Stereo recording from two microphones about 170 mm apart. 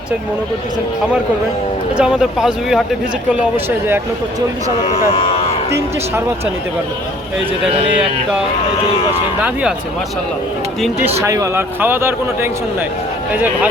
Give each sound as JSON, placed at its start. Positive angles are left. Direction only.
{"t": 2.0, "sound": "speech", "side_deg": -5}
{"t": 3.8, "sound": "speech", "side_deg": -15}
{"t": 5.1, "sound": "a sound", "side_deg": 35}
{"t": 5.7, "sound": "speech", "side_deg": -15}
{"t": 9.4, "sound": "speech", "side_deg": -5}
{"t": 11.2, "sound": "speech", "side_deg": -20}